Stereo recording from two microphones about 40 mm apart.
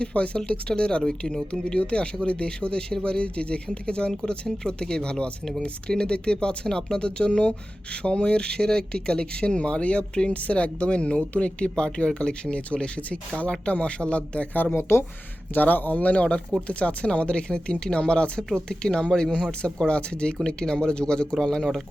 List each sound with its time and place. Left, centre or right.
0.0 s speech: left
10.3 s speech: left
14.5 s speech: left
14.8 s speech: left
15.5 s speech: left; by 21.8 s centre